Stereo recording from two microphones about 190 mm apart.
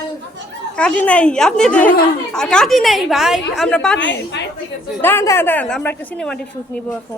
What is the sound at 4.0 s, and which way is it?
Speech, 70° left (ahead or behind).